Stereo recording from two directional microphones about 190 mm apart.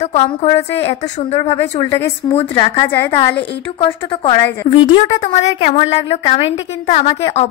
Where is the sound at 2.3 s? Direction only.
30° left (ahead or behind).